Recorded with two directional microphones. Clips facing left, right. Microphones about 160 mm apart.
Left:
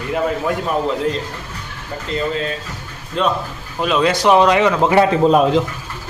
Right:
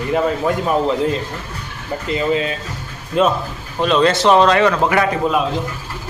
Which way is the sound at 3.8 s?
5° left (ahead or behind).